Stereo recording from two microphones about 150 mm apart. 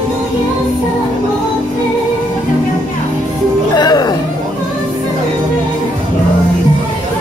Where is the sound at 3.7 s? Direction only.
30° left (ahead or behind).